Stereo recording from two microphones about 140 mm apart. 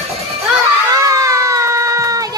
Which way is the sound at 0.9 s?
25° right (ahead or behind).